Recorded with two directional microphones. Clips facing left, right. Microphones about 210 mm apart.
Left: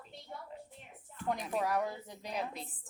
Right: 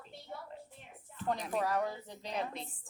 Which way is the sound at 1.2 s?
10° left (ahead or behind).